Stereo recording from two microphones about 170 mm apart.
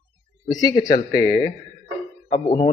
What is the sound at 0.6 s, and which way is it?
Speech, 25° left (ahead or behind).